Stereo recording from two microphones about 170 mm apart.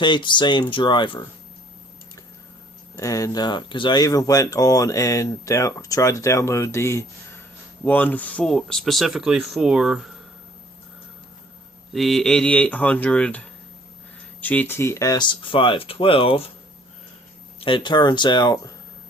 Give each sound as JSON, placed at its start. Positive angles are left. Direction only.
{"t": 0.0, "sound": "speech", "side_deg": 30}
{"t": 2.9, "sound": "speech", "side_deg": 20}
{"t": 11.9, "sound": "speech", "side_deg": 0}
{"t": 17.6, "sound": "speech", "side_deg": 30}